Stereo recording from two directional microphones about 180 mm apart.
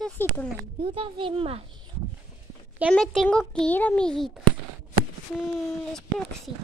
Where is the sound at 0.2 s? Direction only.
10° left (ahead or behind).